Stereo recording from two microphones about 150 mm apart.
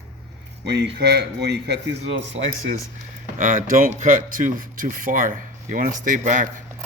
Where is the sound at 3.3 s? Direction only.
60° right (ahead or behind).